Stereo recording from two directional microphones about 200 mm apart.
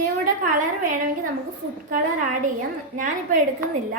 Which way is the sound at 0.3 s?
40° right (ahead or behind).